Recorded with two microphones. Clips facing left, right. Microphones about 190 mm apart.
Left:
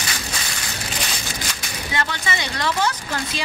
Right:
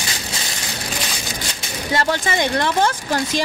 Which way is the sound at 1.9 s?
45° right (ahead or behind).